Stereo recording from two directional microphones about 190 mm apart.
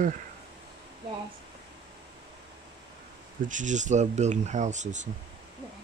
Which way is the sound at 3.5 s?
40° right (ahead or behind).